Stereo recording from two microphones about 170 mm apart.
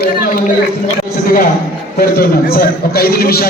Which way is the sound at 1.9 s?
65° left (ahead or behind).